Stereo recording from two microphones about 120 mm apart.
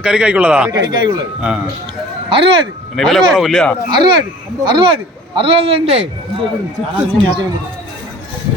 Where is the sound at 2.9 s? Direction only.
Centre (ahead or behind).